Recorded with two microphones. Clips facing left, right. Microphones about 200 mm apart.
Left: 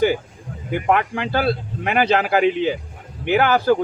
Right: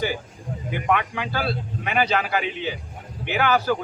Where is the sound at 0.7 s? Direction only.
50° left (ahead or behind).